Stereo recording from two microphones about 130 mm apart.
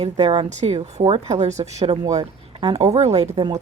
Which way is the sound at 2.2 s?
50° right (ahead or behind).